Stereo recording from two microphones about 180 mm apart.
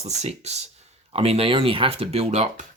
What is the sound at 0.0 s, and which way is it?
Speech, 35° right (ahead or behind).